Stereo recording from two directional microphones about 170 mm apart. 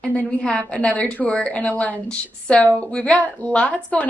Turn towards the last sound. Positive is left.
turn(degrees=10)  # may be behind; listen again after turning